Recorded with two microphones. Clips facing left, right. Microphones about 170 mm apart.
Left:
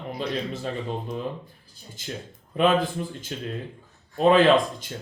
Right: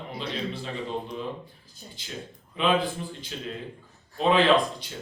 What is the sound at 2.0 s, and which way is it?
Speech, 45° left (ahead or behind).